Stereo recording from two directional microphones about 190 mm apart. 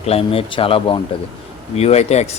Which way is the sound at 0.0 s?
30° left (ahead or behind).